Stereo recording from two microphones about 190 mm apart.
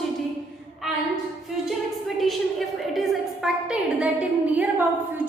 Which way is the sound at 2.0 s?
Centre (ahead or behind).